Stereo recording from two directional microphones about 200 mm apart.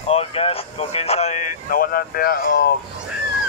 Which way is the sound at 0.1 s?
30° left (ahead or behind).